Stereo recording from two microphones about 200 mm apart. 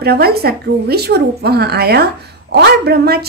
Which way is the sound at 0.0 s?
50° right (ahead or behind).